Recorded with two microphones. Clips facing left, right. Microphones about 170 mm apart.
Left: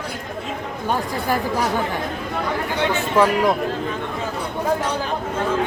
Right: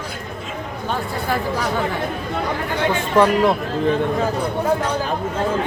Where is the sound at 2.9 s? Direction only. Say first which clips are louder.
Right 2 dB; 5° left (ahead or behind).